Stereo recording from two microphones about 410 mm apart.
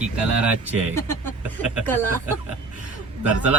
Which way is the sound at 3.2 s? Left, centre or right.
Centre.